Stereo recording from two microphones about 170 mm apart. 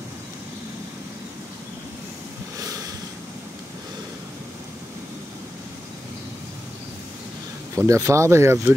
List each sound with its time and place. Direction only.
7.7 s speech: 15° right (ahead or behind)